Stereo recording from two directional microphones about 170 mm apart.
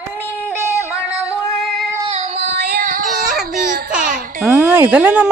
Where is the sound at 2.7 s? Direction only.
55° right (ahead or behind).